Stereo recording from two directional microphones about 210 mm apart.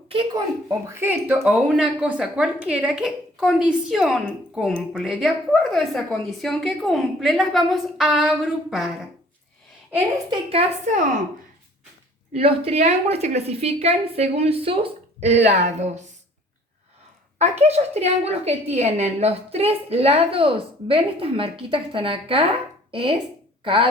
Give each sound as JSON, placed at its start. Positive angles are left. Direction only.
{"t": 0.1, "sound": "a woman's voice", "side_deg": -25}
{"t": 0.7, "sound": "a woman's voice", "side_deg": -15}
{"t": 10.2, "sound": "a woman's voice", "side_deg": -30}
{"t": 12.3, "sound": "a woman's voice", "side_deg": -25}
{"t": 17.3, "sound": "a woman's voice", "side_deg": -30}